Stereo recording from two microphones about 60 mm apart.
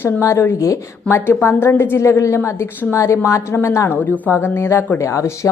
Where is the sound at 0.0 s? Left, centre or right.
Left.